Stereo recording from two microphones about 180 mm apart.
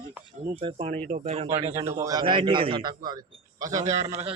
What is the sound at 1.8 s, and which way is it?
A man's voice, 15° right (ahead or behind).